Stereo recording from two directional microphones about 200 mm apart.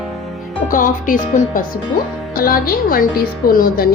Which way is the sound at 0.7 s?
40° left (ahead or behind).